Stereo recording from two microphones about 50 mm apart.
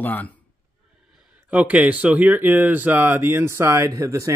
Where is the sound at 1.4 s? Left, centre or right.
Right.